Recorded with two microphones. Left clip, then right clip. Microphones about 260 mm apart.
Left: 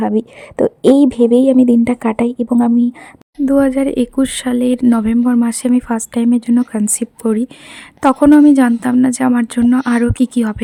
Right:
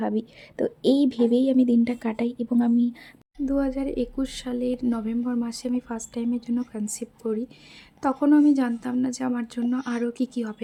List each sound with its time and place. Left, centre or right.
0.0 s speech: left
3.3 s speech: left